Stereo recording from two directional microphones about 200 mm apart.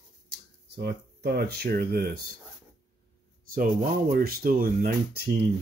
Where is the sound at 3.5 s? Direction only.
45° right (ahead or behind).